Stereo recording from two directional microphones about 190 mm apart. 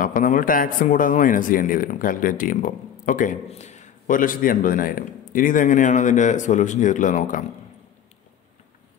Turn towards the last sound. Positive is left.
turn(degrees=40)  # may be behind; listen again after turning